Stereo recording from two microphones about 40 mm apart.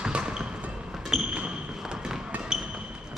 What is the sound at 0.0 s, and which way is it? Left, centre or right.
Basketball bounce, right.